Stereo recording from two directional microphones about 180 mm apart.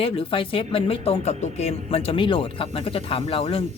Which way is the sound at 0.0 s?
30° left (ahead or behind).